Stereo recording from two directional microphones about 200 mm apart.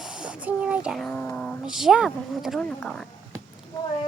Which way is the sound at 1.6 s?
5° right (ahead or behind).